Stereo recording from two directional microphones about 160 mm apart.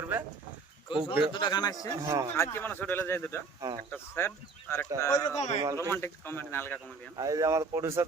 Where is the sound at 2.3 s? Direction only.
15° left (ahead or behind).